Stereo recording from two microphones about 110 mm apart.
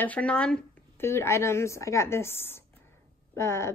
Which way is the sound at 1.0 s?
25° left (ahead or behind).